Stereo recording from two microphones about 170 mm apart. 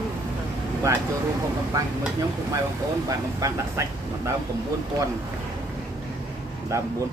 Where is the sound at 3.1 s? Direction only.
20° right (ahead or behind).